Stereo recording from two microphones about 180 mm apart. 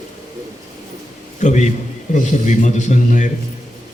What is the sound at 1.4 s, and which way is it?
A man's voice, 40° left (ahead or behind).